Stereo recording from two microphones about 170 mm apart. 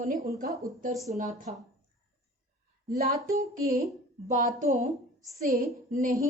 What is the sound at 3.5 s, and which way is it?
Speech, 60° right (ahead or behind).